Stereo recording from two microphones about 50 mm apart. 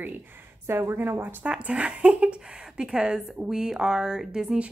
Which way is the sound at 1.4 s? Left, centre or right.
Right.